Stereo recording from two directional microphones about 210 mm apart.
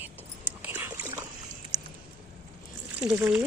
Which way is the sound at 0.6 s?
10° right (ahead or behind).